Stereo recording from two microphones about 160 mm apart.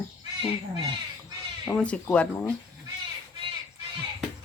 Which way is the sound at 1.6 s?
5° left (ahead or behind).